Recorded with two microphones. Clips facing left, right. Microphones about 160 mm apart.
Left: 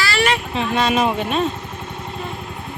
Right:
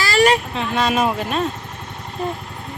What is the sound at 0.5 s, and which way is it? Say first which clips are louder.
Speech: left 1 dB; centre (ahead or behind).